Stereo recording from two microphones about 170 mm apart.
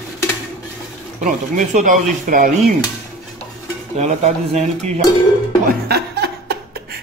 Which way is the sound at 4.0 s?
40° right (ahead or behind).